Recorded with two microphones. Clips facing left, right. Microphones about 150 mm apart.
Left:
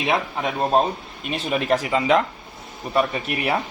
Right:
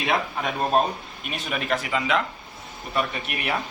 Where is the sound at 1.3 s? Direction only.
30° left (ahead or behind).